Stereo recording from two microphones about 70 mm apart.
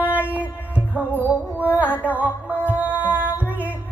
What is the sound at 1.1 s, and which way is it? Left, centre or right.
Music, right.